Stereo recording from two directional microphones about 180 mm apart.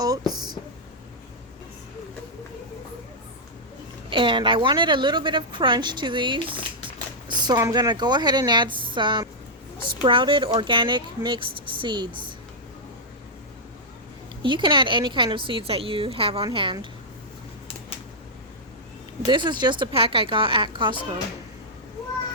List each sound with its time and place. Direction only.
0.0 s a sound: 20° right (ahead or behind)
4.1 s a woman's voice: 30° right (ahead or behind)
14.4 s a woman's voice: 25° right (ahead or behind)
19.3 s a woman's voice: 25° right (ahead or behind)